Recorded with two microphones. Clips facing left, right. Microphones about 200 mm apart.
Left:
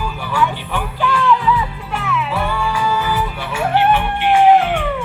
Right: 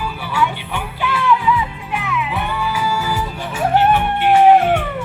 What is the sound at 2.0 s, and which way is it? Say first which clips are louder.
Music: left 2 dB; 15° right (ahead or behind).